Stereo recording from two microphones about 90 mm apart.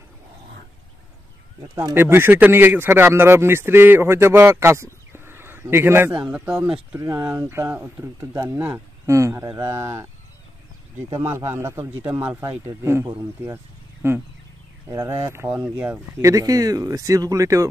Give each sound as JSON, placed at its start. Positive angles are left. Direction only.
{"t": 2.0, "sound": "a man's voice", "side_deg": -25}
{"t": 7.0, "sound": "a man's voice", "side_deg": -35}
{"t": 11.2, "sound": "a man's voice", "side_deg": -30}
{"t": 16.2, "sound": "speech", "side_deg": -40}